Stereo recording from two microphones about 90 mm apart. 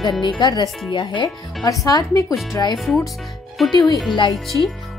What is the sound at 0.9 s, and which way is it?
Speech, 60° left (ahead or behind).